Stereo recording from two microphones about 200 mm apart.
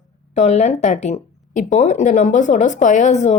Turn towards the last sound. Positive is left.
turn(degrees=35)  # may be behind; listen again after turning